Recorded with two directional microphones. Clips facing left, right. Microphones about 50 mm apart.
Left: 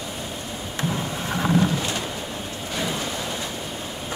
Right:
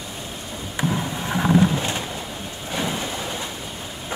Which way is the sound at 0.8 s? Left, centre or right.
Centre.